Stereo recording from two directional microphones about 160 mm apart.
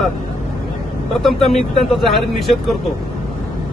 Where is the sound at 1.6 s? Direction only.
Centre (ahead or behind).